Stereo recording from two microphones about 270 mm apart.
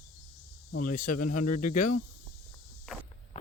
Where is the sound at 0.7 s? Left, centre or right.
Left.